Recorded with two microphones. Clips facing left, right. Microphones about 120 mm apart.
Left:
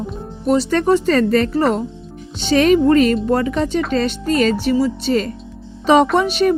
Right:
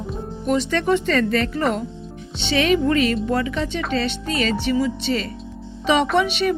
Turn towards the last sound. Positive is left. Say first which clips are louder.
# left 4 dB
turn(degrees=40)  # may be behind; listen again after turning